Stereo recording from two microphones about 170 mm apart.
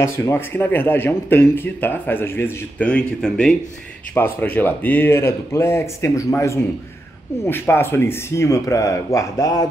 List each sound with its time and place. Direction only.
0.0 s speech: 15° left (ahead or behind)